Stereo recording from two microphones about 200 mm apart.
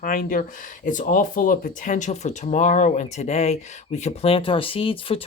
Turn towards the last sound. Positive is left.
turn(degrees=25)  # may be behind; listen again after turning